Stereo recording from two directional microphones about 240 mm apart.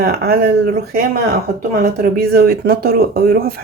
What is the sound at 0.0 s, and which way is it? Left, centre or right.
Speech, right.